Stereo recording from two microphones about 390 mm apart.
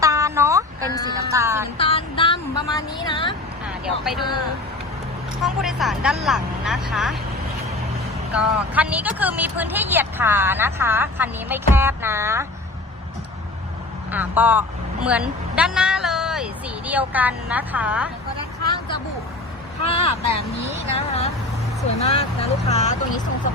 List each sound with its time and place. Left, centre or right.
0.0 s a sound: centre
1.8 s a sound: centre
3.8 s speech: centre
5.4 s speech: centre
8.3 s speech: centre
14.1 s a woman's voice: centre
19.8 s speech: centre